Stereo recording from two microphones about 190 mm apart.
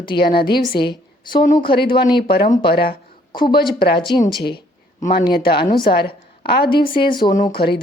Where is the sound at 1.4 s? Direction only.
40° left (ahead or behind).